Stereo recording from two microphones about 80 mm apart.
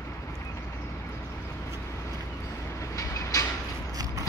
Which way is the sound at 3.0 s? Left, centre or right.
Left.